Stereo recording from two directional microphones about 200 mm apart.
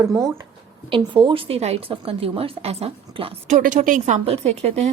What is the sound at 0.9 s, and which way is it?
Speech, 25° right (ahead or behind).